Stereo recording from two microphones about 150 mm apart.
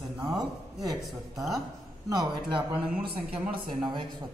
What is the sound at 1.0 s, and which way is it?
Speech, centre (ahead or behind).